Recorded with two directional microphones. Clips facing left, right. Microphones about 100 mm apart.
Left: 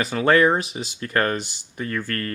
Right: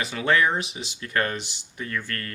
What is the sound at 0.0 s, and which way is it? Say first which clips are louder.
Speech: left 5 dB; 45° left (ahead or behind).